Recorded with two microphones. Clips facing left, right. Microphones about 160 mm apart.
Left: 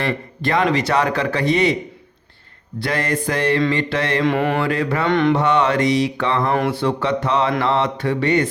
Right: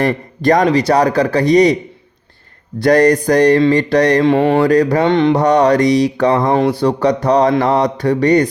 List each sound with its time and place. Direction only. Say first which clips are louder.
0.0 s speech: right 8 dB; 40° right (ahead or behind)
2.7 s speech: right 12 dB; 45° right (ahead or behind)
5.0 s mantra: right 5 dB; 25° right (ahead or behind)
5.3 s speech: right 6 dB; 40° right (ahead or behind)